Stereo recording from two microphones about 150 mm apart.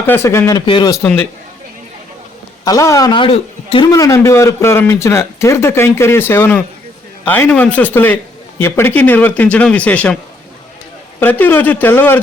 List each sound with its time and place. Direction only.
0.0 s speech: 15° left (ahead or behind)
2.6 s speech: 20° left (ahead or behind)
3.1 s a man's voice: 40° left (ahead or behind)
3.8 s a man's voice: 20° left (ahead or behind)
11.2 s a man's voice: 10° left (ahead or behind)